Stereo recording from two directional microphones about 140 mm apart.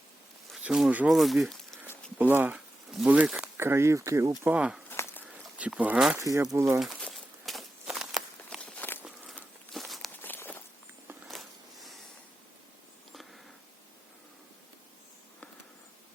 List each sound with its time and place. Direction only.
0.5 s speech: 5° right (ahead or behind)
2.1 s speech: 10° right (ahead or behind)
3.6 s speech: 20° right (ahead or behind)
4.4 s speech: 5° right (ahead or behind)
4.9 s a sound: 15° left (ahead or behind)
5.3 s speech: 10° right (ahead or behind)
6.1 s speech: 20° right (ahead or behind)
6.7 s walk: centre (ahead or behind)
9.0 s a sound: centre (ahead or behind)
10.2 s walk: 15° left (ahead or behind)
11.3 s a sound: centre (ahead or behind)